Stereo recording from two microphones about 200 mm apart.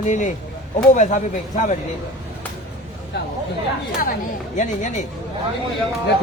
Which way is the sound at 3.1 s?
55° left (ahead or behind).